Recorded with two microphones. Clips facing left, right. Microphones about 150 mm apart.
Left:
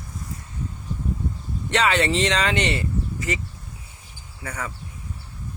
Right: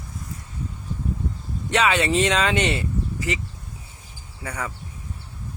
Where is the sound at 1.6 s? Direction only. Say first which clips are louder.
Even; 10° right (ahead or behind).